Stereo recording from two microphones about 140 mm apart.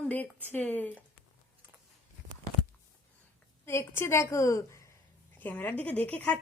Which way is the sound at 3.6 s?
20° left (ahead or behind).